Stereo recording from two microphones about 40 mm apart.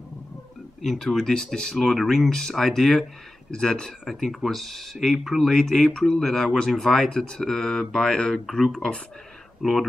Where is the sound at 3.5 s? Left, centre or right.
Left.